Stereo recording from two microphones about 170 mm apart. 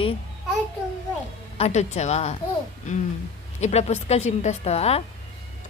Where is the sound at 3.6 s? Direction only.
40° left (ahead or behind).